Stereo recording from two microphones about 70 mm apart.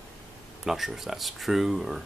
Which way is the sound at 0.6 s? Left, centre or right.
Centre.